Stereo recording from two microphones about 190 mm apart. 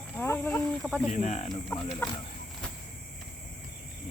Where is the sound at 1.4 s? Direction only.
5° left (ahead or behind).